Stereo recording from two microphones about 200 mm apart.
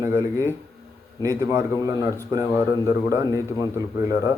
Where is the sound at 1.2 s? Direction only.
15° right (ahead or behind).